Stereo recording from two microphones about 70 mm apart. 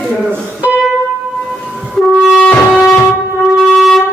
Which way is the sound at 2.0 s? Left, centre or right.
Centre.